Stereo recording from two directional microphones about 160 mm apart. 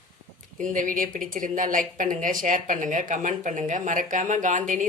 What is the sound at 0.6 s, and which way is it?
A woman's voice, 55° right (ahead or behind).